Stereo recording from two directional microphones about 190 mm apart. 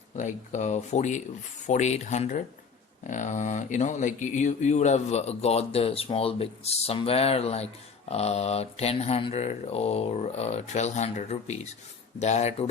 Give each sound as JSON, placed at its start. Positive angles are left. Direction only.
{"t": 0.2, "sound": "speech", "side_deg": 40}